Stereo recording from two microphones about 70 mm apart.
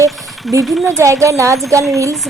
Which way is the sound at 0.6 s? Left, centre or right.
Centre.